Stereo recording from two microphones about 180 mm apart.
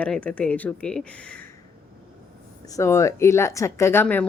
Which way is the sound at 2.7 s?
15° left (ahead or behind).